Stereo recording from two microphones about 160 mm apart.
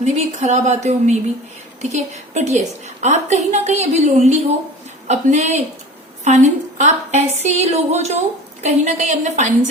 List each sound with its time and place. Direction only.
0.0 s a woman's voice: 45° right (ahead or behind)